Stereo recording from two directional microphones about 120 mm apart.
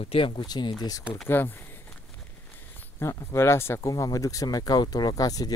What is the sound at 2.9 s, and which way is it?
Speech, 25° left (ahead or behind).